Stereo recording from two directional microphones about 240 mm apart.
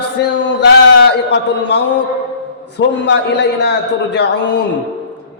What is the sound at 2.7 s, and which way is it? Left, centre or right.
Speech, left.